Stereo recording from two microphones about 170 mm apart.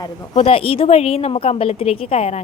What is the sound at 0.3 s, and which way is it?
A woman's voice, 35° left (ahead or behind).